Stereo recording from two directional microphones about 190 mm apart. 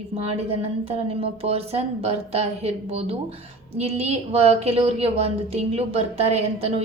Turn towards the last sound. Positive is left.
turn(degrees=-30)  # may be behind; listen again after turning